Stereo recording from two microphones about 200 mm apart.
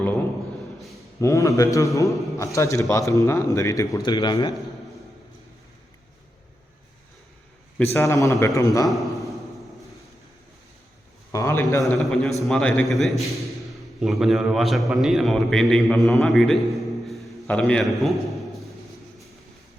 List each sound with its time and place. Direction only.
1.2 s speech: 15° left (ahead or behind)
7.9 s speech: 15° left (ahead or behind)
8.9 s a man's voice: centre (ahead or behind)
11.3 s speech: 15° left (ahead or behind)
11.8 s a man's voice: 5° left (ahead or behind)